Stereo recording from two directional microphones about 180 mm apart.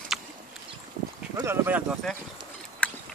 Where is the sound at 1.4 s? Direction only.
10° right (ahead or behind).